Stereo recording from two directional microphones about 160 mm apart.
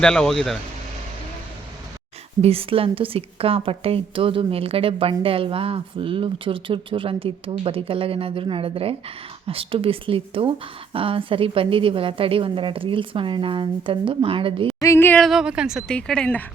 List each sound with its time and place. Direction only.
0.0 s speech: 5° left (ahead or behind)
2.4 s a woman's voice: 35° right (ahead or behind)
14.8 s a sound: 15° left (ahead or behind)
15.2 s speech: centre (ahead or behind)
15.9 s speech: 5° left (ahead or behind)